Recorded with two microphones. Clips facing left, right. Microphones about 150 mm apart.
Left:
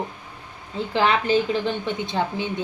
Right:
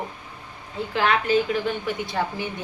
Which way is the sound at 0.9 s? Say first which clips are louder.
Left 1 dB; 30° left (ahead or behind).